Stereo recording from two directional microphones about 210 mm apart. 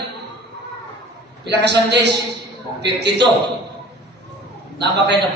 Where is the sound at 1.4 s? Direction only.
55° right (ahead or behind).